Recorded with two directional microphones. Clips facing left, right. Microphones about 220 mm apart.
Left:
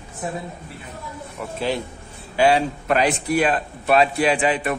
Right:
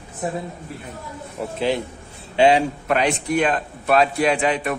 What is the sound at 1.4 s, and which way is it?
A man's voice, 30° right (ahead or behind).